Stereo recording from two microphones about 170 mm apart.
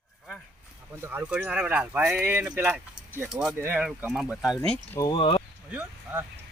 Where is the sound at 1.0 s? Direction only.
10° right (ahead or behind).